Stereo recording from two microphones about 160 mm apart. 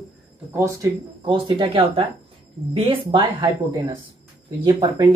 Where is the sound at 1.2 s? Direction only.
30° right (ahead or behind).